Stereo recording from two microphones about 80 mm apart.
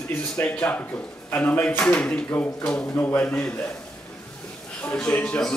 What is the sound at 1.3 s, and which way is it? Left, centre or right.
Speech, left.